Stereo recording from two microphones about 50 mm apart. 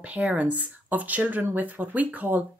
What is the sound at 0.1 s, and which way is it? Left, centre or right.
A woman's voice, right.